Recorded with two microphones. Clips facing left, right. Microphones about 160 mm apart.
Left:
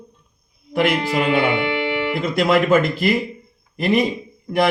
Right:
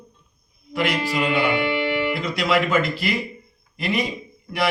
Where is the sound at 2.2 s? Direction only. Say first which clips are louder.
Left 4 dB; 50° left (ahead or behind).